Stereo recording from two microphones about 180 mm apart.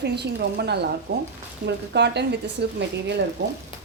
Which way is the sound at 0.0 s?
65° right (ahead or behind).